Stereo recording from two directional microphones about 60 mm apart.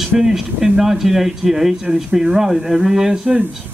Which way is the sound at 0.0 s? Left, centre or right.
Centre.